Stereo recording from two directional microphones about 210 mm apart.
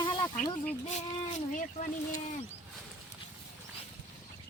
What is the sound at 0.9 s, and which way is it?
Speech, 35° left (ahead or behind).